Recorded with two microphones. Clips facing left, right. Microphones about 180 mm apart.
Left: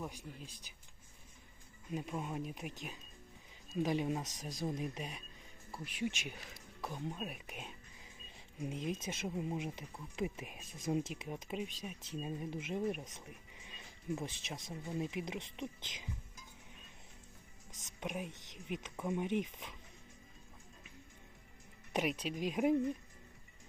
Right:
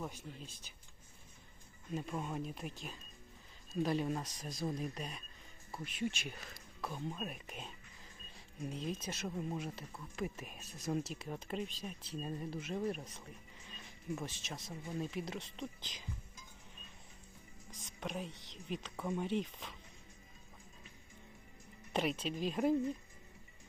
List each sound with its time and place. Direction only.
0.0 s speech: 10° left (ahead or behind)
1.9 s speech: 10° left (ahead or behind)
13.7 s a sound: 20° left (ahead or behind)
14.9 s speech: 15° left (ahead or behind)
18.0 s speech: 15° left (ahead or behind)
21.9 s speech: 10° left (ahead or behind)